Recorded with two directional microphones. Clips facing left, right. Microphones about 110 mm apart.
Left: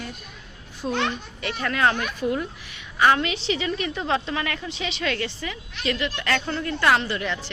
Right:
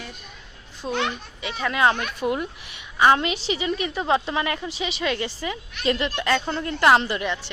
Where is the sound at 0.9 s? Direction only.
10° right (ahead or behind).